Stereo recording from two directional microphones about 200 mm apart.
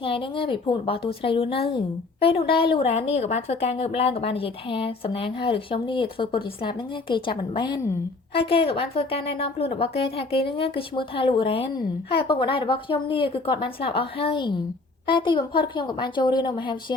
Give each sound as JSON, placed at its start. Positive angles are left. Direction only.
{"t": 0.0, "sound": "a woman's voice", "side_deg": 25}